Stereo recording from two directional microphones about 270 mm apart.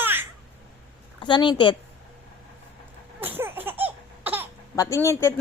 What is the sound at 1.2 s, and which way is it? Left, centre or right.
Speech, centre.